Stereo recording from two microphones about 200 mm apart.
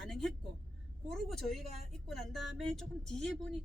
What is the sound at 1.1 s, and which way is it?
Speech, centre (ahead or behind).